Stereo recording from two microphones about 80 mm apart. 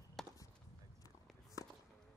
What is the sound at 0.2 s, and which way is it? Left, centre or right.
Chop, centre.